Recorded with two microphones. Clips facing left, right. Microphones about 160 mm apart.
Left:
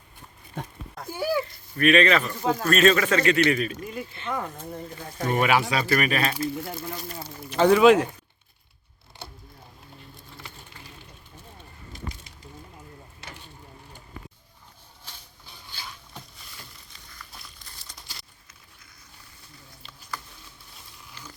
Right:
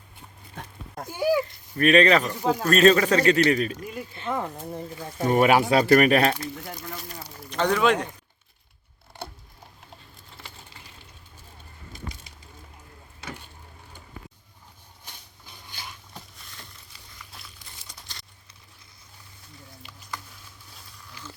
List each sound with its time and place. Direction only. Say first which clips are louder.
1.8 s a man's voice: right 2 dB; 35° right (ahead or behind)
2.2 s speech: right 1 dB; 15° right (ahead or behind)
2.6 s a man's voice: right 2 dB; 35° right (ahead or behind)
4.3 s speech: right 2 dB; 25° right (ahead or behind)
4.9 s speech: right 4 dB; 5° right (ahead or behind)
5.3 s speech: right 4 dB; 40° right (ahead or behind); by 6.3 s 55° right (ahead or behind)
6.3 s speech: left 5 dB; 5° left (ahead or behind)